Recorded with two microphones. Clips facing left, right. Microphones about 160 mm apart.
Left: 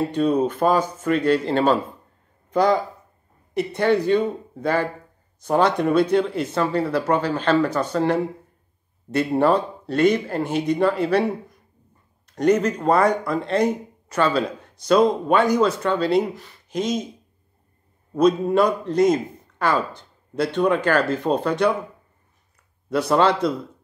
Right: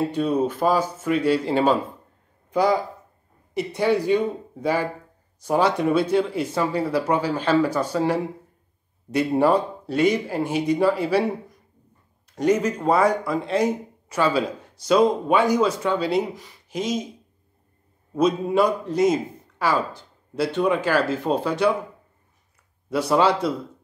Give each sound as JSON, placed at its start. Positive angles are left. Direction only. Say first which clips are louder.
{"t": 0.1, "sound": "speech", "louder": "left 2 dB", "side_deg": -5}
{"t": 9.4, "sound": "speech", "louder": "even", "side_deg": -10}
{"t": 12.4, "sound": "speech", "louder": "left 2 dB", "side_deg": -10}
{"t": 18.1, "sound": "speech", "louder": "left 2 dB", "side_deg": -10}
{"t": 22.8, "sound": "speech", "louder": "left 1 dB", "side_deg": -10}